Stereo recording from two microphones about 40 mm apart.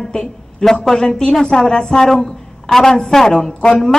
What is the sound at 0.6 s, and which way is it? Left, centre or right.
A woman's voice, left.